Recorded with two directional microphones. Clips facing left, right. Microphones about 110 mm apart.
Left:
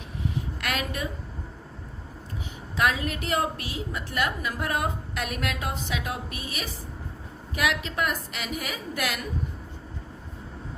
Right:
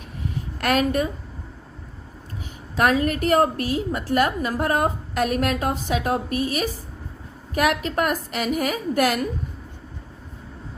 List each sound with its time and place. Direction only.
0.6 s a woman's voice: 45° right (ahead or behind)
2.7 s a woman's voice: 45° right (ahead or behind)